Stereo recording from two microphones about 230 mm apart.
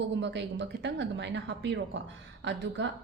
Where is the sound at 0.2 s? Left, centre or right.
Right.